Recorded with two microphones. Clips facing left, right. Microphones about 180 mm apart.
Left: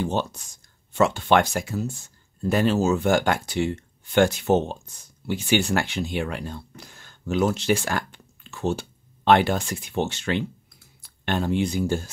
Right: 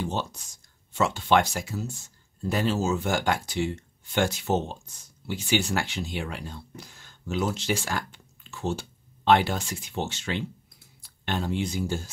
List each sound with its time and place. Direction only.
0.0 s speech: 55° left (ahead or behind)